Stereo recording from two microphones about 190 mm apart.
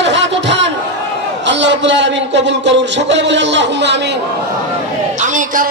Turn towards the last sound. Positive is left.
turn(degrees=-45)  # may be behind; listen again after turning